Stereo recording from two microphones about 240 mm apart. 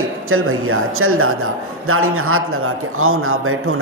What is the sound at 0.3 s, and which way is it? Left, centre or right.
A man's voice, right.